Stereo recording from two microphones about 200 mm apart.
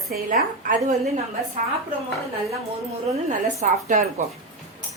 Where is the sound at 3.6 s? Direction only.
35° right (ahead or behind).